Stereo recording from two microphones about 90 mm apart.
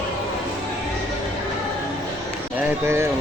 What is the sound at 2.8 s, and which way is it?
Speech, 30° right (ahead or behind).